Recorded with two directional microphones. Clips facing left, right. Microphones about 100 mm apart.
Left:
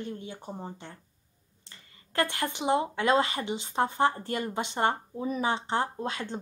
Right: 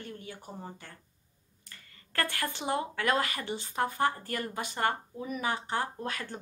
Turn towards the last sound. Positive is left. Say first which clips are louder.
# left 3 dB
turn(degrees=25)  # may be behind; listen again after turning